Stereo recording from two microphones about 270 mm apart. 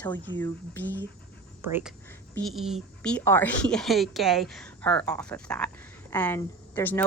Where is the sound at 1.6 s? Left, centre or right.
Centre.